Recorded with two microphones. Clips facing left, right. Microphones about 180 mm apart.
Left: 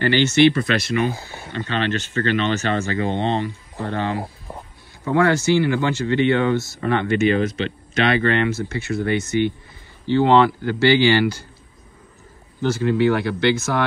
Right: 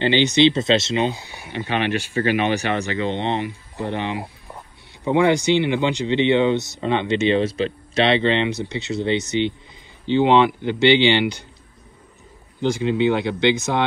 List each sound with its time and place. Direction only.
0.0 s speech: 15° right (ahead or behind)
12.6 s speech: 15° right (ahead or behind)